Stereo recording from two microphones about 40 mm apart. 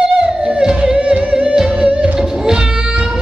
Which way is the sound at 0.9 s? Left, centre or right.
Right.